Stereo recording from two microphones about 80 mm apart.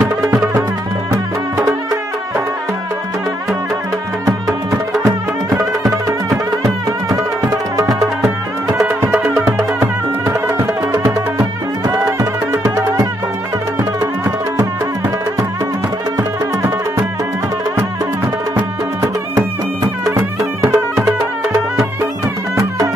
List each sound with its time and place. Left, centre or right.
6.6 s music: right
9.6 s music: right
11.3 s music: right
20.2 s music: right